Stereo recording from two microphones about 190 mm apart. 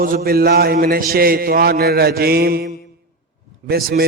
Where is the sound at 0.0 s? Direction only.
50° right (ahead or behind).